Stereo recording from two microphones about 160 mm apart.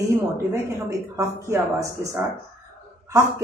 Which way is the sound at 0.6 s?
20° right (ahead or behind).